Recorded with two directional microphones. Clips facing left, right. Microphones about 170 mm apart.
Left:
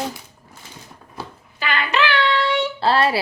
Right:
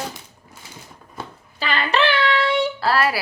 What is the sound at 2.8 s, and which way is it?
Speech, 25° left (ahead or behind).